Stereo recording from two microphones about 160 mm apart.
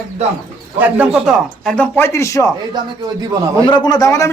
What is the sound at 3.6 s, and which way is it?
Speech, 25° left (ahead or behind).